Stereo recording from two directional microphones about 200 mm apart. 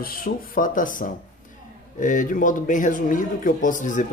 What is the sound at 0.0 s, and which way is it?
A man's voice, 45° left (ahead or behind).